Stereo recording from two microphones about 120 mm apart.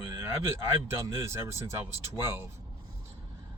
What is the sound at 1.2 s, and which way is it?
Speech, 20° right (ahead or behind).